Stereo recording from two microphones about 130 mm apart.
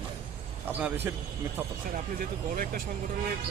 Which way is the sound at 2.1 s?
90° right.